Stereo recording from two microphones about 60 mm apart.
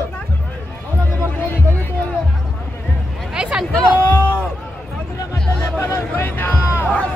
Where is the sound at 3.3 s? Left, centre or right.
Centre.